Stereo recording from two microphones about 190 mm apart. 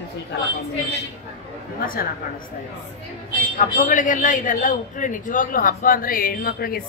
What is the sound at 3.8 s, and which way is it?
A man's voice, 45° left (ahead or behind).